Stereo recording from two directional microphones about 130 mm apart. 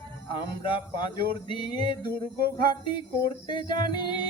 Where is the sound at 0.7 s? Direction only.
35° left (ahead or behind).